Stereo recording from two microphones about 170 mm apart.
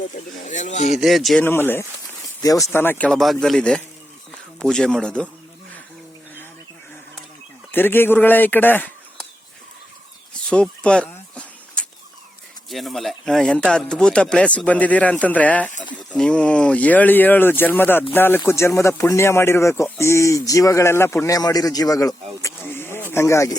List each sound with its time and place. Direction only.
0.4 s speech: 45° left (ahead or behind)
0.9 s speech: centre (ahead or behind)
1.5 s speech: 15° left (ahead or behind)
3.1 s speech: centre (ahead or behind)
7.7 s speech: 10° left (ahead or behind)
10.5 s a sound: 5° left (ahead or behind)
12.7 s speech: centre (ahead or behind); by 23.6 s 15° left (ahead or behind)